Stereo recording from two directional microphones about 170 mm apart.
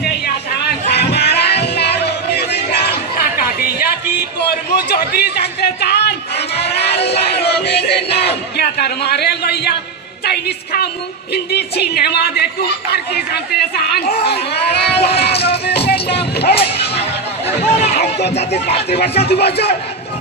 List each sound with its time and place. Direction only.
0.7 s music: 70° left (ahead or behind)
4.7 s a sound: 65° left (ahead or behind)
7.2 s music: 75° left (ahead or behind)
8.5 s a man's voice: 70° left (ahead or behind)
14.2 s speech: 75° left (ahead or behind)
17.0 s chatter: 35° left (ahead or behind)
18.3 s speech: 35° left (ahead or behind)
19.1 s speech: 70° left (ahead or behind)